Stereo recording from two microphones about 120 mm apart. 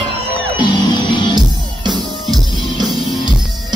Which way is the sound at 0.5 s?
35° left (ahead or behind).